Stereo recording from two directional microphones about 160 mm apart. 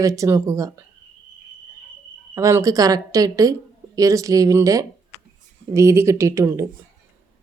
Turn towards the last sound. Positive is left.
turn(degrees=-15)  # may be behind; listen again after turning